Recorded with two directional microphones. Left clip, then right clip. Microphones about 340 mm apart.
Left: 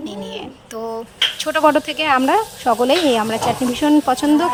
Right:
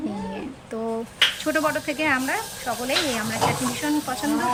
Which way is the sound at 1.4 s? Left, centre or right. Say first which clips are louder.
Left 8 dB; centre.